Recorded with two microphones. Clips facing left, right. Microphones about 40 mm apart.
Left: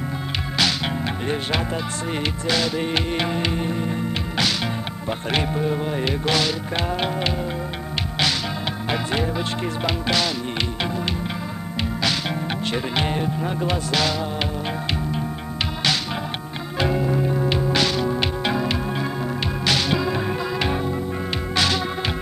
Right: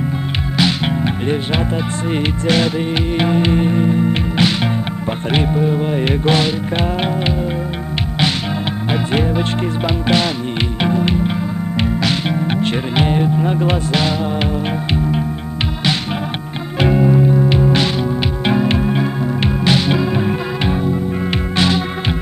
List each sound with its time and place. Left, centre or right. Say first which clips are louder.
0.6 s music: right 6 dB; right
2.4 s music: right 7 dB; right
2.8 s music: right 5 dB; centre
5.3 s speech: right 6 dB; centre
5.8 s music: right 6 dB; right
10.0 s music: right 7 dB; right
16.8 s music: right 8 dB; right
17.2 s music: right 8 dB; centre
17.5 s music: right 5 dB; right
20.7 s music: right 6 dB; centre
21.5 s music: right 5 dB; right